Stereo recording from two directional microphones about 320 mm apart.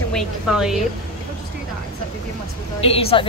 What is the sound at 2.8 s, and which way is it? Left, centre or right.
Speech, centre.